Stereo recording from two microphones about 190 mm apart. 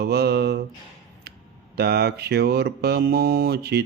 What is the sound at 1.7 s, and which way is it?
Speech, 55° right (ahead or behind).